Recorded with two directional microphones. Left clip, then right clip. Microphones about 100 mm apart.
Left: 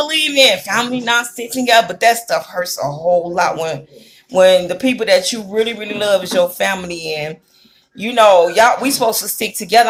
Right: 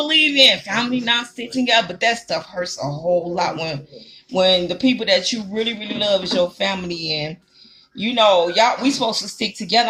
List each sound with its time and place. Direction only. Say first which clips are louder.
0.0 s speech: left 1 dB; 15° right (ahead or behind)